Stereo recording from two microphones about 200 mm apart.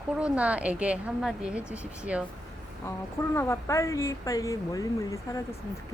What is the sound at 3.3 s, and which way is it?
A woman's voice, 15° left (ahead or behind).